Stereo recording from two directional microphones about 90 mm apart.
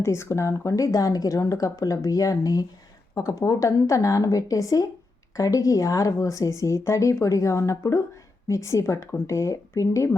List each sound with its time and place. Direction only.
0.0 s speech: 30° left (ahead or behind)